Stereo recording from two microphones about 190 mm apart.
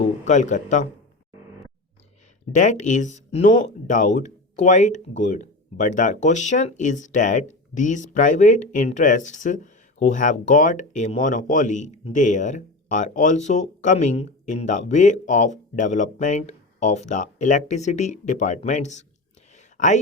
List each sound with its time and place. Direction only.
0.0 s speech: 40° left (ahead or behind)
2.5 s speech: 40° left (ahead or behind)